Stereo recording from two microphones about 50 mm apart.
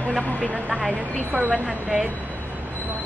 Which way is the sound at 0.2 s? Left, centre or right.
Left.